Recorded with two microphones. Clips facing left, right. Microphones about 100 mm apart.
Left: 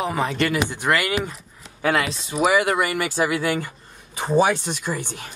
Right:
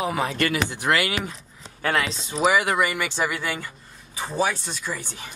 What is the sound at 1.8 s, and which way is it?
Speech, 20° left (ahead or behind).